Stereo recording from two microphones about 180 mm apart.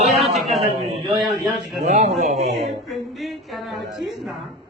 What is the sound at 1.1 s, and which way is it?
Speech, centre (ahead or behind).